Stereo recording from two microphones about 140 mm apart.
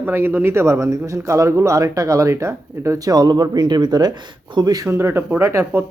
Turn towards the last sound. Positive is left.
turn(degrees=-20)  # may be behind; listen again after turning